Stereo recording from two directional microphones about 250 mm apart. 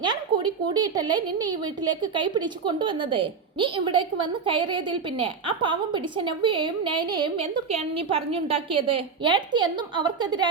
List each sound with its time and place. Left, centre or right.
0.0 s a woman's voice: centre